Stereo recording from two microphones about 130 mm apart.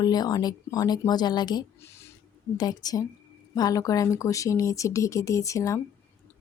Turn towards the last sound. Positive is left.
turn(degrees=25)  # may be behind; listen again after turning